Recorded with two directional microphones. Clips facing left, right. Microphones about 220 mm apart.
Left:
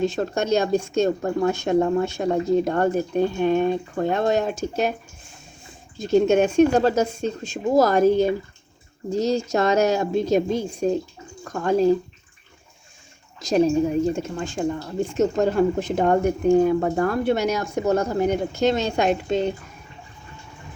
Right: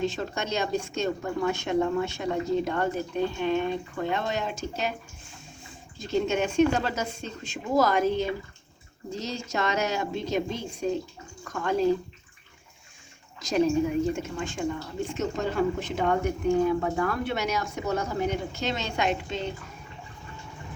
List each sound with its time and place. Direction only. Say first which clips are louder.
0.0 s speech: left 7 dB; 45° left (ahead or behind)
6.1 s a woman's voice: left 9 dB; 50° left (ahead or behind)
13.5 s a woman's voice: left 5 dB; 35° left (ahead or behind)